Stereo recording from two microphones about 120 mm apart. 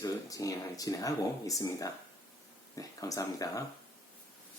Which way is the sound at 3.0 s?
30° left (ahead or behind).